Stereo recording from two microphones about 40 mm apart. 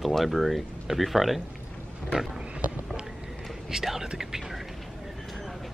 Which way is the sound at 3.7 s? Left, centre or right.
Centre.